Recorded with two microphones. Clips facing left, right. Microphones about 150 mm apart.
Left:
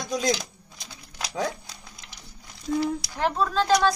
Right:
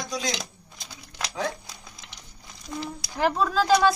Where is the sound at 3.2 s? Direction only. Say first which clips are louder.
Right 2 dB; centre (ahead or behind).